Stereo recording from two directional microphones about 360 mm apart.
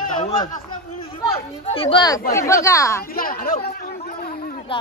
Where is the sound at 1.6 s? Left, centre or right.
Centre.